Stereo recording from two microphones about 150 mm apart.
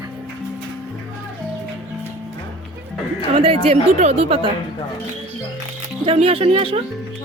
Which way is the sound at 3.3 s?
40° right (ahead or behind).